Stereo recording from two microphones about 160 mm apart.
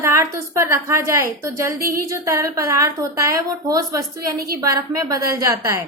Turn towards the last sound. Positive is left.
turn(degrees=-20)  # may be behind; listen again after turning